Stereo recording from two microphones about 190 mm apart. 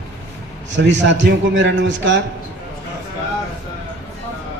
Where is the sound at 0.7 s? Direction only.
70° right (ahead or behind).